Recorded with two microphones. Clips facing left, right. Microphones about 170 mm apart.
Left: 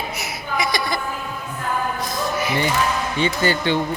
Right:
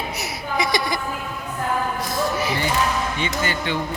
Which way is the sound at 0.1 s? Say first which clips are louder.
Even; 35° right (ahead or behind).